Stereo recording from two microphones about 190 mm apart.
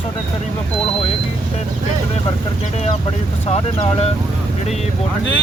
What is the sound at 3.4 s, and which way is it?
Speech, 30° left (ahead or behind).